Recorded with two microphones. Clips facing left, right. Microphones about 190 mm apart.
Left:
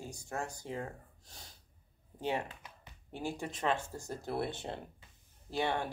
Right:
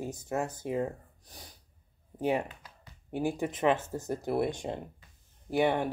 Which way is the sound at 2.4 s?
20° left (ahead or behind).